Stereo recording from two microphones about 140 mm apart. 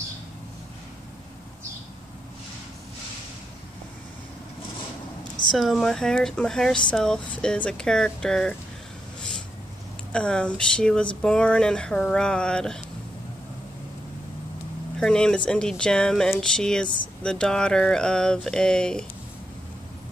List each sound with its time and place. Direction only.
5.5 s speech: centre (ahead or behind)
10.1 s speech: 5° left (ahead or behind)
15.0 s speech: 5° left (ahead or behind)
16.8 s speech: 35° left (ahead or behind)
17.2 s speech: 5° left (ahead or behind)